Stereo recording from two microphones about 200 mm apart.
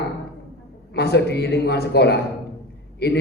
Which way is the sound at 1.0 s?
55° left (ahead or behind).